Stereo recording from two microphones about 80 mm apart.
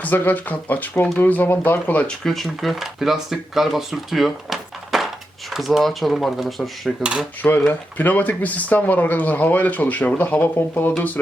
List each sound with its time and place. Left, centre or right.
0.0 s speech: left
2.2 s speech: centre
7.0 s dishes: centre
7.7 s speech: left